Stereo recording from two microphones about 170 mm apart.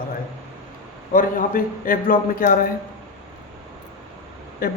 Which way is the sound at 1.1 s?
55° left (ahead or behind).